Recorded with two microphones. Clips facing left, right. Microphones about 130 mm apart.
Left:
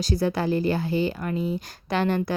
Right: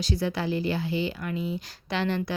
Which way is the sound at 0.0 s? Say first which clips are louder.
Left 4 dB; 40° left (ahead or behind).